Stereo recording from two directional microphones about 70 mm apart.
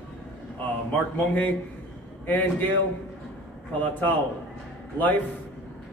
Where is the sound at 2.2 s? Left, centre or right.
Left.